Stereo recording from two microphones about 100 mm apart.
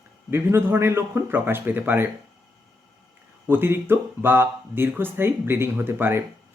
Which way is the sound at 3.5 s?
20° right (ahead or behind).